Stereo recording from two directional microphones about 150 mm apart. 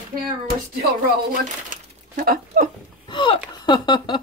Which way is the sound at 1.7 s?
65° right (ahead or behind).